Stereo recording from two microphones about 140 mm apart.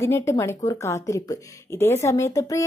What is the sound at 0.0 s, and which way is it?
Speech, 20° left (ahead or behind).